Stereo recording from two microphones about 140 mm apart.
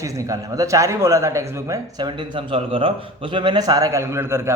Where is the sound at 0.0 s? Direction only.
25° right (ahead or behind).